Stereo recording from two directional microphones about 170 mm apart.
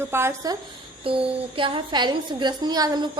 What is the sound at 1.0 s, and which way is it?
A woman's voice, 30° right (ahead or behind).